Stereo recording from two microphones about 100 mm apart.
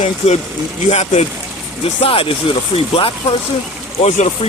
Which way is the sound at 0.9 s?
90° left.